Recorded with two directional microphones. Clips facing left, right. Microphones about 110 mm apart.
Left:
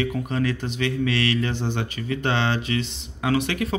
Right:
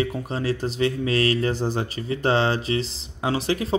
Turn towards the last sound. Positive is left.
turn(degrees=-30)  # may be behind; listen again after turning